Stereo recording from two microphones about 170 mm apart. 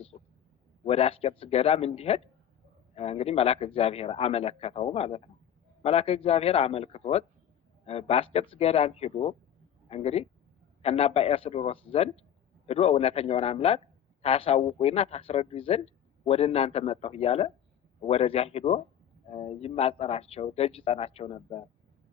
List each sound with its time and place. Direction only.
0.9 s a man's voice: 35° left (ahead or behind)